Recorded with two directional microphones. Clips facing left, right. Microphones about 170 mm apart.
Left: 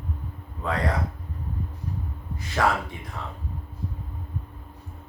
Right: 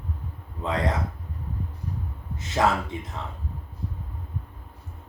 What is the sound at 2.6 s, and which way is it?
Speech, 20° right (ahead or behind).